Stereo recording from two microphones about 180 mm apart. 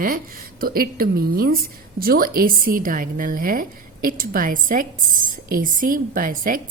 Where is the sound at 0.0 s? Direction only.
55° right (ahead or behind).